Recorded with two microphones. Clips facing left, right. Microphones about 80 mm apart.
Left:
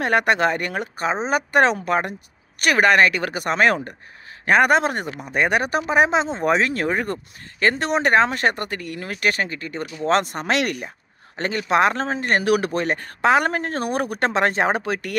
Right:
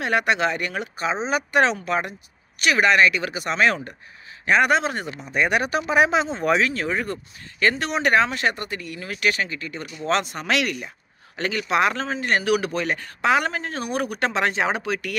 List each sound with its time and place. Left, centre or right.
0.0 s speech: left